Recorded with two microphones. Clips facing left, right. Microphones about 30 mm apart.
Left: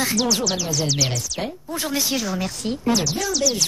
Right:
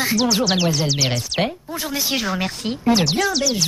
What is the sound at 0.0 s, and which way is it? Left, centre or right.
Speech, centre.